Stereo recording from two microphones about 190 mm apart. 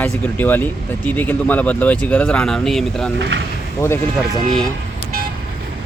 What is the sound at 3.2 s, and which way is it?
Speech, 70° right (ahead or behind).